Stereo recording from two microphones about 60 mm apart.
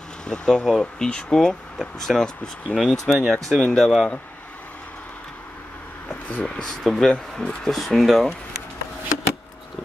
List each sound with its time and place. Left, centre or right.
0.3 s speech: centre
2.9 s speech: centre
6.0 s a sound: centre
6.8 s speech: centre